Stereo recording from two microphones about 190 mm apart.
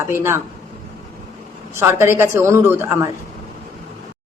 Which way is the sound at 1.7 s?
15° right (ahead or behind).